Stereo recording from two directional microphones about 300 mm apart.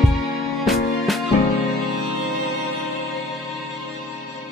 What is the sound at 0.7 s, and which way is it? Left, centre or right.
Music, centre.